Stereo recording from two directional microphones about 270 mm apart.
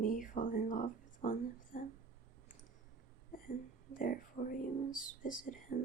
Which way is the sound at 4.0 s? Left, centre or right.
Left.